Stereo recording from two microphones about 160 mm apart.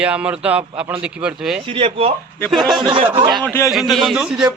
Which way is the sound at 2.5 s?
Centre (ahead or behind).